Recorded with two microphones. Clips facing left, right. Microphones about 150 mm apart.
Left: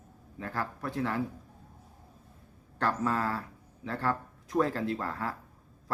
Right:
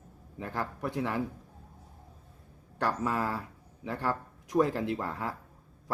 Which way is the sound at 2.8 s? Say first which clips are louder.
Left 1 dB; 15° right (ahead or behind).